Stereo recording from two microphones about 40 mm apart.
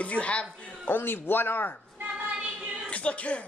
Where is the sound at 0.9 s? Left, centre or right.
Left.